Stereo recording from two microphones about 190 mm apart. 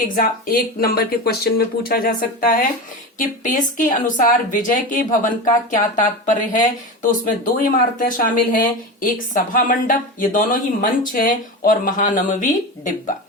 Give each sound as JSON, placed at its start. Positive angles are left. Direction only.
{"t": 0.2, "sound": "speech", "side_deg": 50}